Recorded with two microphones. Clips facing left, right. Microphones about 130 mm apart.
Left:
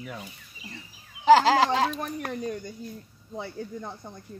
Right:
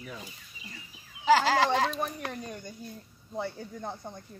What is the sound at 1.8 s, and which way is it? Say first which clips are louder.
Speech: left 2 dB; 50° left (ahead or behind).